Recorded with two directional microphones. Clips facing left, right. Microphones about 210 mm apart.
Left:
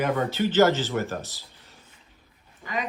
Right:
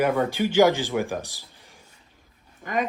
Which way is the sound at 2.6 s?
50° right (ahead or behind).